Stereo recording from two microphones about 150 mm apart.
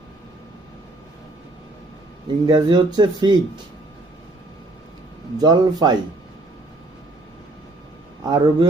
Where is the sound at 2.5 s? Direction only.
30° right (ahead or behind).